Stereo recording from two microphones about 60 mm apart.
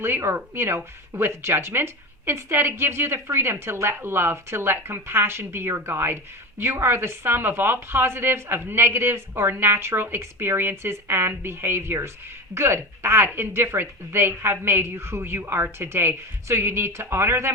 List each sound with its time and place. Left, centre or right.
0.0 s a woman's voice: right